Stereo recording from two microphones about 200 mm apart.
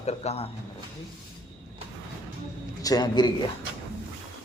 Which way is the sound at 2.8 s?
20° left (ahead or behind).